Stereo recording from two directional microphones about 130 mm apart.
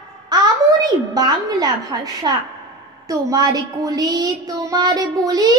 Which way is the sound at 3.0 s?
30° right (ahead or behind).